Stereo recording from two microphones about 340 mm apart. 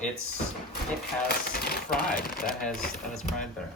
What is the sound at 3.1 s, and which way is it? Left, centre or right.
Speech, centre.